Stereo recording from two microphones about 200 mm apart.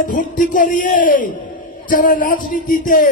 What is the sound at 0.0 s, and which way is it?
Speech, 40° left (ahead or behind).